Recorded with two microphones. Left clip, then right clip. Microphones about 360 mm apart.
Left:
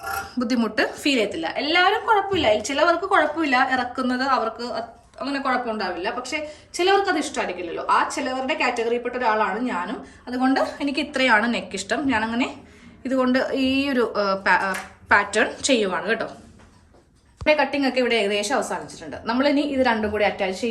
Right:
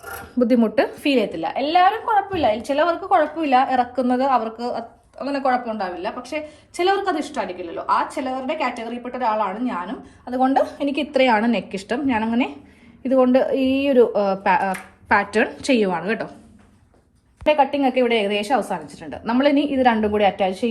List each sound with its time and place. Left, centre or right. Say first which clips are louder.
0.3 s a woman's voice: right 6 dB; centre
10.8 s a woman's voice: right 2 dB; centre
11.1 s a woman's voice: right 2 dB; centre
17.4 s a woman's voice: right 2 dB; centre